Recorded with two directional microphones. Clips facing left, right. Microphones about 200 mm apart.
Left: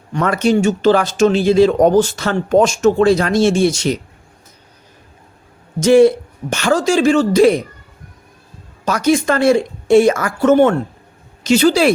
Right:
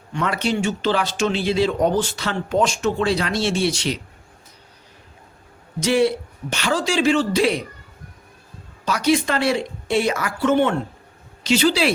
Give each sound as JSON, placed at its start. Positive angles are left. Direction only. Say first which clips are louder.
{"t": 0.1, "sound": "speech", "louder": "left 8 dB", "side_deg": 45}
{"t": 5.8, "sound": "speech", "louder": "left 9 dB", "side_deg": 45}
{"t": 8.8, "sound": "speech", "louder": "left 4 dB", "side_deg": 45}